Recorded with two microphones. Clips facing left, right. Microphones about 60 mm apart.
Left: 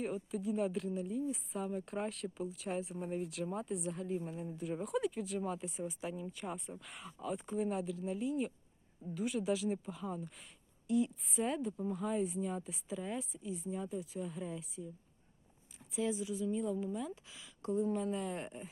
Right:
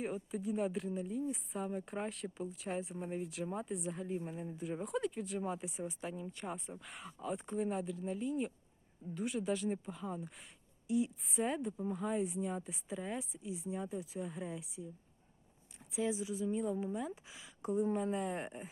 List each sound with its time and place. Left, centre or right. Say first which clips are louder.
0.0 s speech: left 1 dB; centre
15.9 s speech: even; centre
17.6 s speech: even; centre